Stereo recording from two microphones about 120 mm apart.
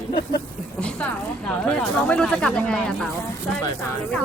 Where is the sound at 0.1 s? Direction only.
40° left (ahead or behind).